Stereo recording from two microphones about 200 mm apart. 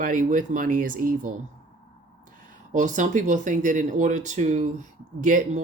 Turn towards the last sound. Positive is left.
turn(degrees=-40)  # may be behind; listen again after turning